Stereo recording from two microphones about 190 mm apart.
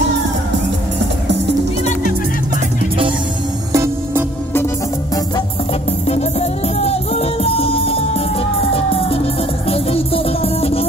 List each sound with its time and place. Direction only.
3.7 s music: 15° right (ahead or behind)
5.9 s music: 35° left (ahead or behind)